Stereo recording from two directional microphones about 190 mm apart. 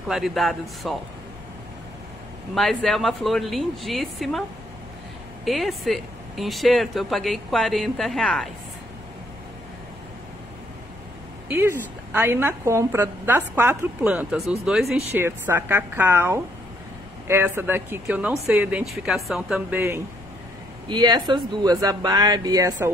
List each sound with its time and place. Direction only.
0.1 s speech: centre (ahead or behind)
2.5 s speech: centre (ahead or behind)
11.4 s a woman's voice: 10° right (ahead or behind)
15.0 s a woman's voice: 10° right (ahead or behind)
20.9 s speech: 25° right (ahead or behind)